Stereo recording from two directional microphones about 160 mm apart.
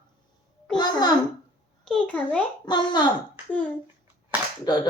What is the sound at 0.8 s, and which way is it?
Babbling, 25° left (ahead or behind).